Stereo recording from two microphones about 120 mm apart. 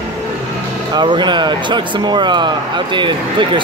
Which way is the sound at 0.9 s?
40° right (ahead or behind).